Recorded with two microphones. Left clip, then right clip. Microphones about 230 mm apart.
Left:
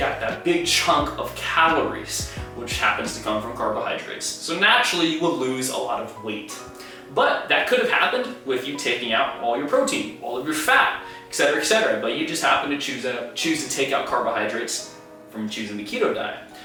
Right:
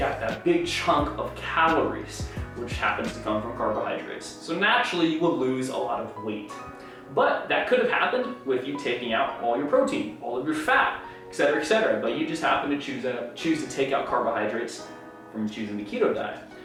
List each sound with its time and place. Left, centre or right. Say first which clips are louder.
0.0 s speech: left 3 dB; centre
3.4 s speech: left 2 dB; centre
3.8 s speech: left 4 dB; centre
14.1 s speech: left 2 dB; centre
14.3 s speech: left 3 dB; centre